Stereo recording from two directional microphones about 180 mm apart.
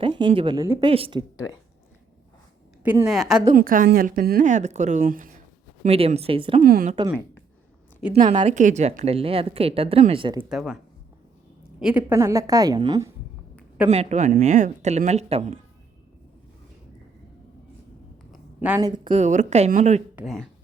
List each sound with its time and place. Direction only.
0.0 s speech: 25° right (ahead or behind)
0.9 s a woman's voice: 30° right (ahead or behind)
2.8 s a woman's voice: 10° right (ahead or behind)
3.5 s a woman's voice: 50° right (ahead or behind); by 6.6 s 30° right (ahead or behind)
6.6 s a woman's voice: 50° right (ahead or behind)
8.1 s a woman's voice: 40° right (ahead or behind)
10.5 s a woman's voice: centre (ahead or behind)
11.8 s a woman's voice: 5° right (ahead or behind); by 13.1 s 25° right (ahead or behind)
13.9 s a woman's voice: 40° right (ahead or behind)
18.3 s a sound: 10° right (ahead or behind)
18.8 s speech: 25° right (ahead or behind)
19.1 s a woman's voice: 40° right (ahead or behind)
20.2 s a woman's voice: centre (ahead or behind)